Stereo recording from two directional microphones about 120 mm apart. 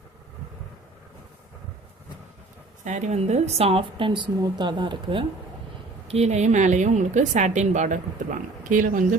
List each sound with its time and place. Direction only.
2.8 s a woman's voice: 80° right; by 5.2 s 40° right (ahead or behind)
6.1 s a woman's voice: 65° right (ahead or behind); by 9.0 s 90° right